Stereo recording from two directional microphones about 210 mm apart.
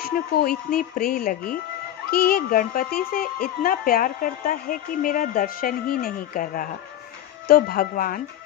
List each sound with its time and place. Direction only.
0.7 s a woman's voice: 40° left (ahead or behind)